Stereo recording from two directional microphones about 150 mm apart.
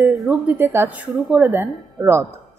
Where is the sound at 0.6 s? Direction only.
15° right (ahead or behind).